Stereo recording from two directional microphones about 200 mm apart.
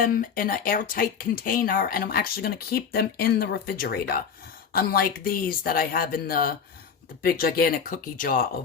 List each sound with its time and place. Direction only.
0.0 s speech: 45° left (ahead or behind)